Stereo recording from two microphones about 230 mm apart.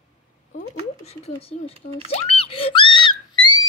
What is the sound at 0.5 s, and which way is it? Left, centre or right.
A woman's voice, left.